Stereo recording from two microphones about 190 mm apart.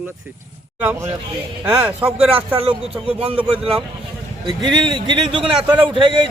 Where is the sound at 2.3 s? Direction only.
30° right (ahead or behind).